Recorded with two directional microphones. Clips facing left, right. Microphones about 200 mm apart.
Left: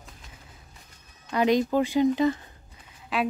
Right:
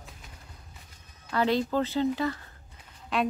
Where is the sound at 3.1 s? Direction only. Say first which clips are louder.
Even; centre (ahead or behind).